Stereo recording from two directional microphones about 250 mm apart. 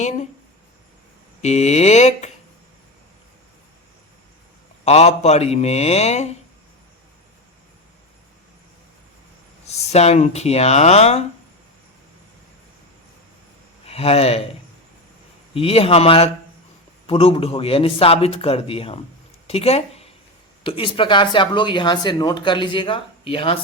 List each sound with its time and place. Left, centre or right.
1.4 s speech: left
4.9 s speech: left
9.6 s speech: left
13.8 s speech: left
15.5 s speech: left